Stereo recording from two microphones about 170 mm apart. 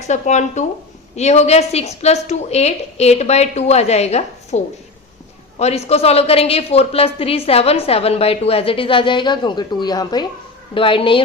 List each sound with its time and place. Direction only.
0.0 s a woman's voice: 45° left (ahead or behind)